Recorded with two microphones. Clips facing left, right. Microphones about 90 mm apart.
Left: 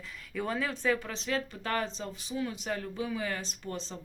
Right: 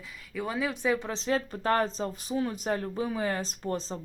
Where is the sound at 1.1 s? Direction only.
30° right (ahead or behind).